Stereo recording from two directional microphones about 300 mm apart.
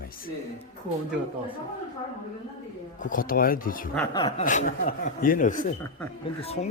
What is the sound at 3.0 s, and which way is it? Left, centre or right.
Speech, left.